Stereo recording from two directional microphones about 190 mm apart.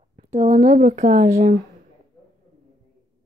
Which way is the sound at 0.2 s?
35° right (ahead or behind).